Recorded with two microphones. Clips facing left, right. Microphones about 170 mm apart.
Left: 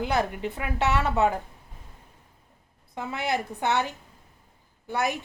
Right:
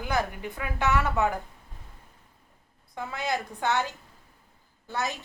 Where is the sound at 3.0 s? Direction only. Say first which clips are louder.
Left 2 dB; 20° left (ahead or behind).